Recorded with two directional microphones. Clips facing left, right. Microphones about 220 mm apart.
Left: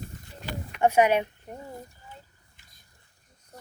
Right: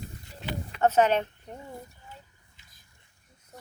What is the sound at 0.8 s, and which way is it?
Speech, 10° left (ahead or behind).